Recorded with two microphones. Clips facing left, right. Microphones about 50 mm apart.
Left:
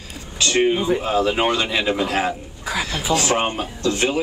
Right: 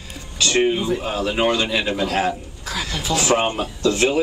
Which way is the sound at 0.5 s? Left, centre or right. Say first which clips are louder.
Left 1 dB; centre.